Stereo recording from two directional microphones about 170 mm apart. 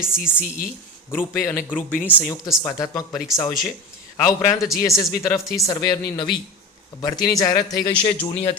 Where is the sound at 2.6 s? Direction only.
20° left (ahead or behind).